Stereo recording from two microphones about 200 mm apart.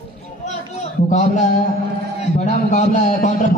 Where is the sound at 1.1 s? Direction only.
35° left (ahead or behind).